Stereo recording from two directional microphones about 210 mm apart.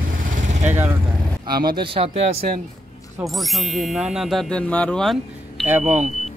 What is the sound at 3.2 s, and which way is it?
Speech, centre (ahead or behind).